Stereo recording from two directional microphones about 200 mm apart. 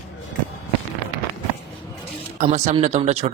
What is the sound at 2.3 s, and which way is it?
Speech, 35° right (ahead or behind).